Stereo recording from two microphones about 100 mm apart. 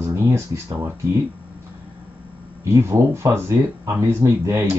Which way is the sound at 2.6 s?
25° right (ahead or behind).